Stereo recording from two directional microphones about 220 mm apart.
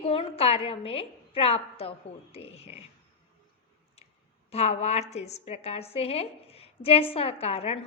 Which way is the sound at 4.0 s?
30° left (ahead or behind).